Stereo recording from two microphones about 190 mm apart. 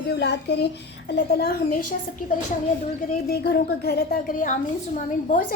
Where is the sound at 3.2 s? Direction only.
55° left (ahead or behind).